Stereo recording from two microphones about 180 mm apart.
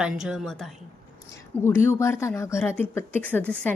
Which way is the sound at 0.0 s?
5° right (ahead or behind).